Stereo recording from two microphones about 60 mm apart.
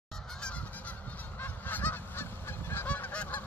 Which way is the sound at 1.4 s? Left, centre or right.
Left.